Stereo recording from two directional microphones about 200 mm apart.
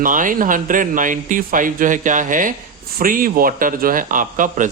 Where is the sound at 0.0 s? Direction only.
40° right (ahead or behind).